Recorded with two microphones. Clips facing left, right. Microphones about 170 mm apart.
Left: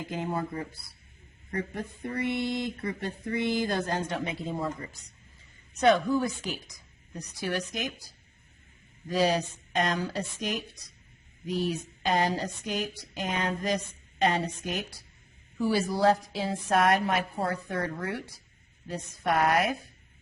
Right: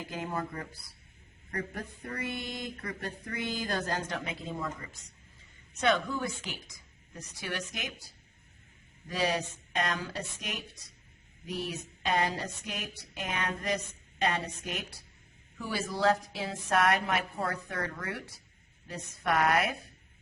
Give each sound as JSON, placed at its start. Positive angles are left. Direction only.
{"t": 0.1, "sound": "speech", "side_deg": 30}
{"t": 9.1, "sound": "speech", "side_deg": 35}